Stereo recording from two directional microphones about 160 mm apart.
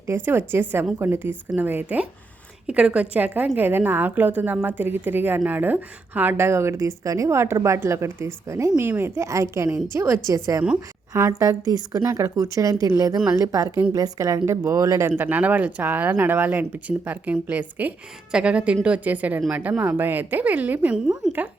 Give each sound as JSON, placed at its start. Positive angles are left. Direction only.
{"t": 0.3, "sound": "a woman's voice", "side_deg": -15}